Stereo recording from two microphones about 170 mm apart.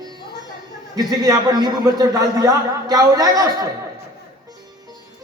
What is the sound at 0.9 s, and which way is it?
A man's voice, 20° right (ahead or behind).